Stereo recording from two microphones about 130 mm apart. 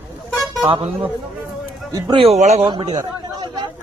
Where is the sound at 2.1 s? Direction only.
45° right (ahead or behind).